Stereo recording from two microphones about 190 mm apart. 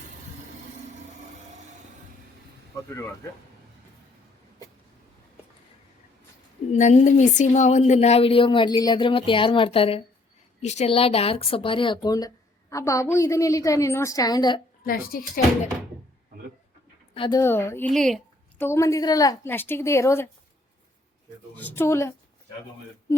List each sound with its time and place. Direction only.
6.7 s a woman's voice: 40° left (ahead or behind); by 14.6 s 20° left (ahead or behind)
14.8 s speech: 50° left (ahead or behind)
17.2 s a woman's voice: 25° left (ahead or behind)
17.4 s a woman's voice: 15° left (ahead or behind)
18.6 s a woman's voice: 15° left (ahead or behind)
21.5 s a woman's voice: 10° left (ahead or behind)